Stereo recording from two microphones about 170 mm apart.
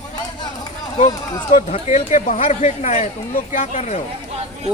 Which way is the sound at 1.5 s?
40° left (ahead or behind).